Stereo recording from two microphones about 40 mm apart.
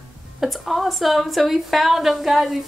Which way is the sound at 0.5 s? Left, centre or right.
Centre.